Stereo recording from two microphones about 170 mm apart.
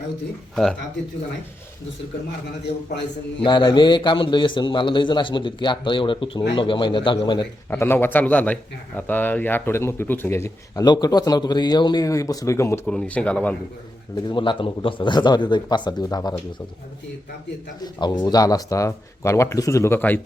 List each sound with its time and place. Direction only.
0.5 s speech: centre (ahead or behind)
3.4 s a man's voice: 25° left (ahead or behind)
7.7 s speech: 10° left (ahead or behind)
14.2 s a man's voice: 25° left (ahead or behind)
17.8 s a man's voice: 25° left (ahead or behind)